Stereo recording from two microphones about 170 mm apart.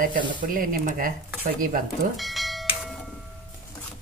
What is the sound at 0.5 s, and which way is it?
Speech, 55° right (ahead or behind).